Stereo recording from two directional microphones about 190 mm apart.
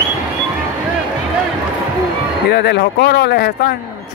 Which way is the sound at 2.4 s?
60° left (ahead or behind).